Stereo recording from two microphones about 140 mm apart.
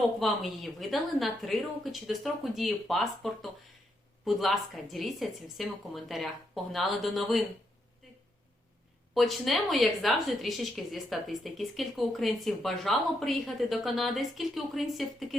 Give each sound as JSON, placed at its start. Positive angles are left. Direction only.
{"t": 0.2, "sound": "speech", "side_deg": 0}
{"t": 9.1, "sound": "speech", "side_deg": 0}